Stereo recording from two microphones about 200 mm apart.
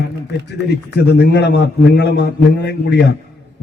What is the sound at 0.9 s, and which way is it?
A man's voice, 55° left (ahead or behind).